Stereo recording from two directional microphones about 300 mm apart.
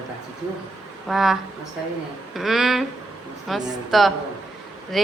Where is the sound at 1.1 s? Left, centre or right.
Centre.